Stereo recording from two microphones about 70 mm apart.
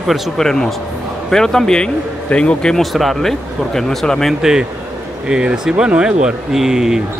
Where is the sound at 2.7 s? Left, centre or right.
Centre.